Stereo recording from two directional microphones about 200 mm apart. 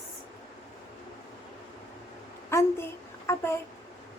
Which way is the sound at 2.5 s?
15° left (ahead or behind).